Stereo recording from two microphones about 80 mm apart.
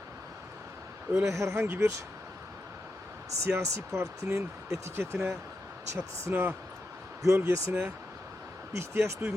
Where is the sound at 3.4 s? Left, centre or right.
Right.